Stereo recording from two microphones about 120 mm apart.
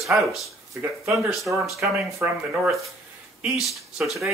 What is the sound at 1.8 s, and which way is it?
Speech, 15° right (ahead or behind).